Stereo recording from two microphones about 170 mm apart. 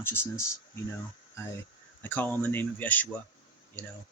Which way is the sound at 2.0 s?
10° left (ahead or behind).